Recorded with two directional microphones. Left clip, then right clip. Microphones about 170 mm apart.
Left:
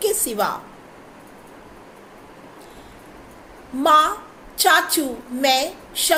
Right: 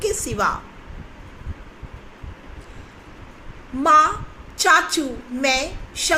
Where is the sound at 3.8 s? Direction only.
10° right (ahead or behind).